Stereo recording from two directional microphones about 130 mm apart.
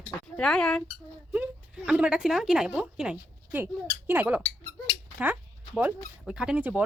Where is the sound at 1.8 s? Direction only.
10° right (ahead or behind).